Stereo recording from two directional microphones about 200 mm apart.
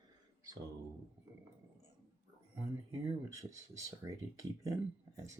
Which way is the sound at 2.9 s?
15° right (ahead or behind).